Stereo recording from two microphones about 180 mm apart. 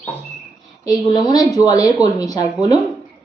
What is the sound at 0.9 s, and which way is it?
Speech, 25° left (ahead or behind).